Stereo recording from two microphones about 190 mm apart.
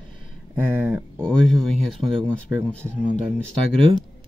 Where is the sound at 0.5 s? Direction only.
10° right (ahead or behind).